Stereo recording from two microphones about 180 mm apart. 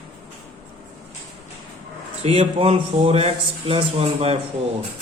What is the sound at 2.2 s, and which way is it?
A man's voice, 35° right (ahead or behind).